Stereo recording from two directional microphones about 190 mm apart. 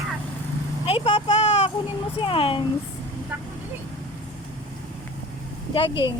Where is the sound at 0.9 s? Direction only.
30° left (ahead or behind).